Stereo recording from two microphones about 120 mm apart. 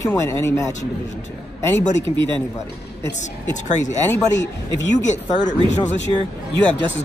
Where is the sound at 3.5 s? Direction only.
90° left.